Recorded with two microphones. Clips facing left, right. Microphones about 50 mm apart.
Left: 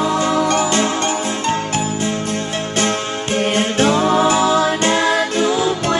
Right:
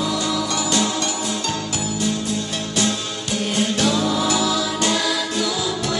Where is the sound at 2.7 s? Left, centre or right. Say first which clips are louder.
Left 4 dB; left.